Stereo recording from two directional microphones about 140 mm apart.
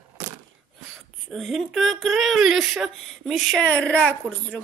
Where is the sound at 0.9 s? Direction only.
Centre (ahead or behind).